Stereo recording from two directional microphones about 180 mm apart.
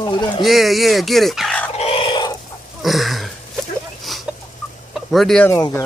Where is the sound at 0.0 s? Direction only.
25° left (ahead or behind).